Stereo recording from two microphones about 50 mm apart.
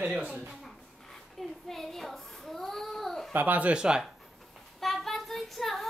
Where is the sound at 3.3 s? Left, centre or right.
Right.